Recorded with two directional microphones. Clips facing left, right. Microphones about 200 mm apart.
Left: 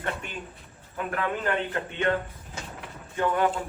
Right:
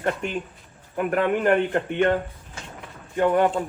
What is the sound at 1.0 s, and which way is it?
Speech, 50° right (ahead or behind).